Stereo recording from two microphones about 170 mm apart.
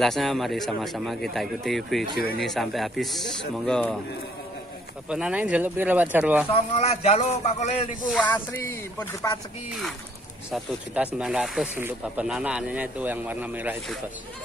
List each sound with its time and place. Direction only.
0.0 s a man's voice: centre (ahead or behind)
2.1 s speech: 65° left (ahead or behind)
2.4 s a man's voice: centre (ahead or behind)
5.1 s speech: 5° right (ahead or behind)
6.5 s a man's voice: 40° left (ahead or behind)
8.1 s speech: 10° left (ahead or behind)
11.1 s speech: 5° right (ahead or behind)